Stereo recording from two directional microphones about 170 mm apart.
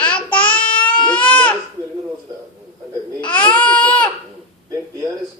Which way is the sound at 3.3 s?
10° left (ahead or behind).